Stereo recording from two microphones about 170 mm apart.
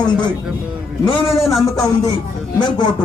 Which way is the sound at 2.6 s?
25° left (ahead or behind).